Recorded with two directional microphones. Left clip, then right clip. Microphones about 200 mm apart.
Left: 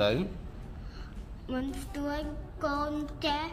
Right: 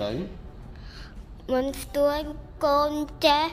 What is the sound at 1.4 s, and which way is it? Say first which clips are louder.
Music: right 10 dB; 50° right (ahead or behind).